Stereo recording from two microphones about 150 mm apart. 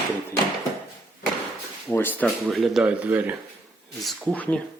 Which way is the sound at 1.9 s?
15° left (ahead or behind).